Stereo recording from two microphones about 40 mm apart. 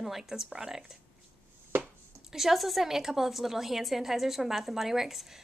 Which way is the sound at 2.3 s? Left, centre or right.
Centre.